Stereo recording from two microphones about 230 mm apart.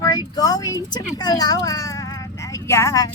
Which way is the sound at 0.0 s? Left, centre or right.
Centre.